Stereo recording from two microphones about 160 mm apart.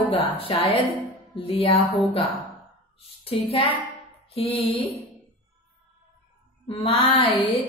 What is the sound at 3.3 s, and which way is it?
Speech, 35° left (ahead or behind).